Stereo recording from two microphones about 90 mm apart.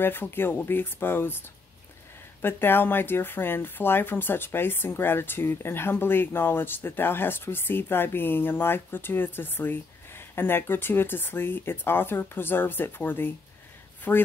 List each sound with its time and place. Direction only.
0.0 s speech: 25° left (ahead or behind)
2.4 s speech: 25° left (ahead or behind)